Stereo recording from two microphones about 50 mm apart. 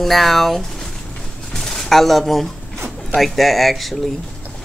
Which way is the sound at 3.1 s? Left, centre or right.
Centre.